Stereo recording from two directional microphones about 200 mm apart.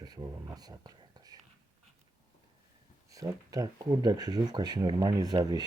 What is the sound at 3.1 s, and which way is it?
Speech, 15° right (ahead or behind).